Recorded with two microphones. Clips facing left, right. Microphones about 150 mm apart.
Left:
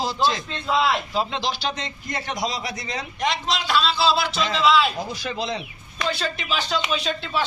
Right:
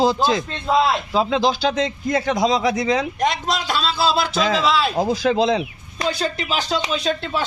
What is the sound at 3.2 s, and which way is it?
A man's voice, 45° right (ahead or behind).